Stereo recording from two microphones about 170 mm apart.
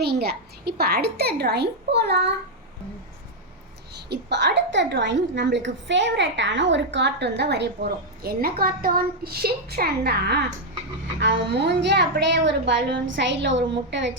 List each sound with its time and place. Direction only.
0.0 s a child's voice: 70° right (ahead or behind)
4.1 s a woman's voice: 90° right; by 10.4 s 75° right (ahead or behind)
11.2 s a woman's voice: 85° right